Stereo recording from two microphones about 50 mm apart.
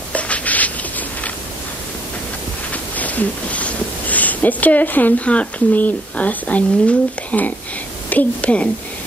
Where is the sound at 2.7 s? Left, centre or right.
Left.